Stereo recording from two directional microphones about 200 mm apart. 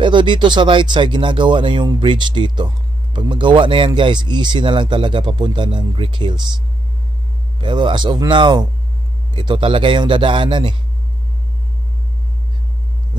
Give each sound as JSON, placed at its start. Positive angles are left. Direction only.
{"t": 0.0, "sound": "speech", "side_deg": -25}
{"t": 7.6, "sound": "speech", "side_deg": -25}